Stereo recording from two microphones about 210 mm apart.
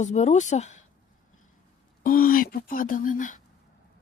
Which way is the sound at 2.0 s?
45° left (ahead or behind).